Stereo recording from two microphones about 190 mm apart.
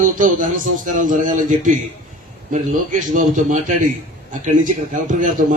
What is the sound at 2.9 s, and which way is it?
Speech, 40° right (ahead or behind).